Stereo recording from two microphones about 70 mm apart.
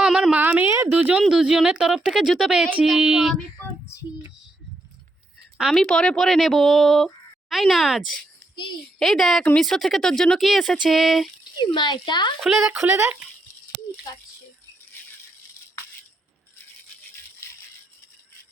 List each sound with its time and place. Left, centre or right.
0.0 s a sound: centre
0.3 s a sound: right
1.3 s speech: centre
5.7 s speech: centre
11.6 s speech: left
12.4 s speech: centre
12.7 s speech: right